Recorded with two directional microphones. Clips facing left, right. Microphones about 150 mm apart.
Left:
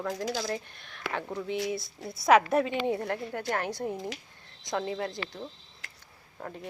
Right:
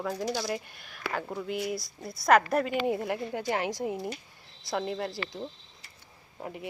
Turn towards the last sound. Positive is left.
turn(degrees=-15)  # may be behind; listen again after turning